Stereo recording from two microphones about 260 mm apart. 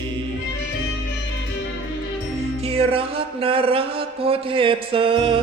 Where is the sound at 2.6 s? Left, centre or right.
Right.